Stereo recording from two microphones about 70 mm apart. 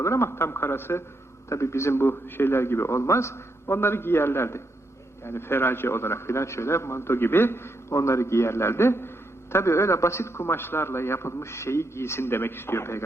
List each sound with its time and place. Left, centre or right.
0.0 s a man's voice: left